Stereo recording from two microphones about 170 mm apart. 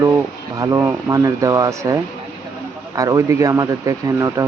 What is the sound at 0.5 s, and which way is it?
Speech, 20° right (ahead or behind).